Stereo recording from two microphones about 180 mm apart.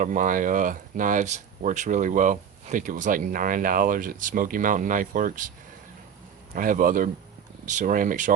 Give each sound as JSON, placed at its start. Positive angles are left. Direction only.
{"t": 0.0, "sound": "speech", "side_deg": -45}
{"t": 6.5, "sound": "speech", "side_deg": -50}